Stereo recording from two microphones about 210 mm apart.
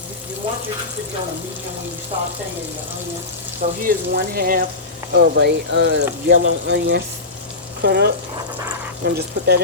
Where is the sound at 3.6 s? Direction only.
35° right (ahead or behind).